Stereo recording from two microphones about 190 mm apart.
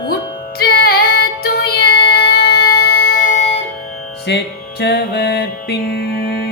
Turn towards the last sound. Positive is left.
turn(degrees=55)  # may be behind; listen again after turning